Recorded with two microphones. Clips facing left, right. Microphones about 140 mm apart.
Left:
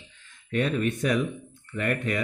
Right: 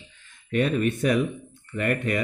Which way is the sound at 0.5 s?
5° right (ahead or behind).